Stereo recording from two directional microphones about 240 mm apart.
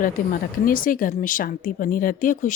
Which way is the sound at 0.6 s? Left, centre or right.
Left.